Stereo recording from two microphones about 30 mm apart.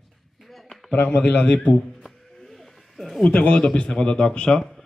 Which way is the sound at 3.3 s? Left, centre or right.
Left.